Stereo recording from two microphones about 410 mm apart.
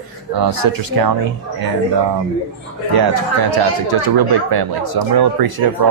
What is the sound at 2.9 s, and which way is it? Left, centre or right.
Speech, right.